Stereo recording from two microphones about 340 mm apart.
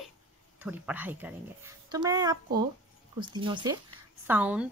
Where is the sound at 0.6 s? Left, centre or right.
Centre.